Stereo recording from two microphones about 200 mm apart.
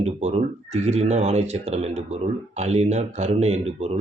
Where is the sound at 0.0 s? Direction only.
35° right (ahead or behind).